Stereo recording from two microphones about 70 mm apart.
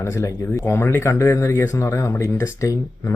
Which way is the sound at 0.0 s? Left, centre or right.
Left.